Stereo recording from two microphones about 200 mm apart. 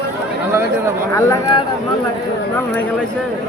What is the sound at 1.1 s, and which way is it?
Speech, 20° left (ahead or behind).